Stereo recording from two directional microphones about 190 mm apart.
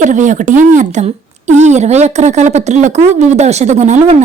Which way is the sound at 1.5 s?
40° right (ahead or behind).